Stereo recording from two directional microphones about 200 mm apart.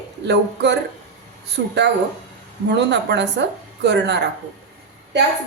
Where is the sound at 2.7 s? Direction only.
60° right (ahead or behind).